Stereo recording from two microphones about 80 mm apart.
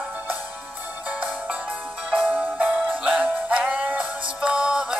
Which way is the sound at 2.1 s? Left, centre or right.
Centre.